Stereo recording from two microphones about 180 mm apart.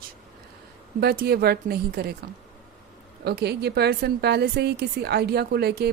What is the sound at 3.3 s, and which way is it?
Speech, 65° right (ahead or behind).